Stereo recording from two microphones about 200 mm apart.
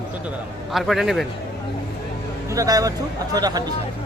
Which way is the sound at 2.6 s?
20° right (ahead or behind).